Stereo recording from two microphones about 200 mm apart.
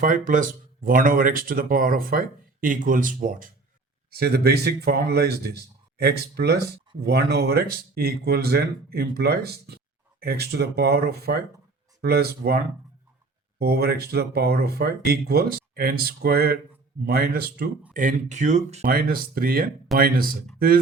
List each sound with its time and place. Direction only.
0.0 s speech: 40° right (ahead or behind)
17.9 s speech: 40° right (ahead or behind)
18.9 s speech: 50° right (ahead or behind)